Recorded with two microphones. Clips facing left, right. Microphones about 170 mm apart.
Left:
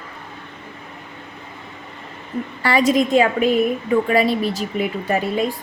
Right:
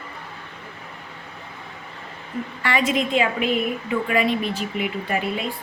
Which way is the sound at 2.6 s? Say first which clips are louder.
Left 6 dB; 35° left (ahead or behind).